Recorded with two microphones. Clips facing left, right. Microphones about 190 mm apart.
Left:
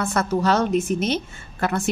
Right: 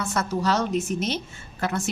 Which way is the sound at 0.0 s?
55° left (ahead or behind).